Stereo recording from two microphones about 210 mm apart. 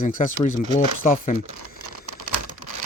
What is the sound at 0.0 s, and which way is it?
Speech, 40° left (ahead or behind).